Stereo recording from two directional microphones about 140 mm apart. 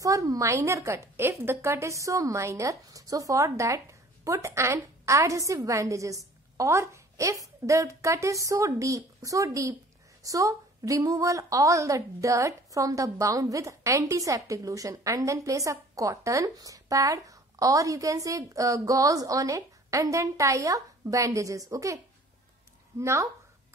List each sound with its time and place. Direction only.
0.0 s a woman's voice: 25° right (ahead or behind)